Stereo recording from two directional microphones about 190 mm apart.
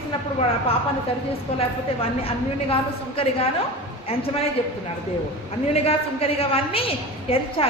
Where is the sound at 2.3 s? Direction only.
30° left (ahead or behind).